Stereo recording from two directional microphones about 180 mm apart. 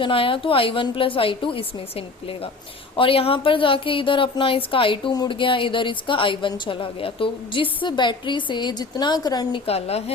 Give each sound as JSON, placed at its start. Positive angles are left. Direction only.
{"t": 0.0, "sound": "speech", "side_deg": 30}
{"t": 9.6, "sound": "a woman's voice", "side_deg": 35}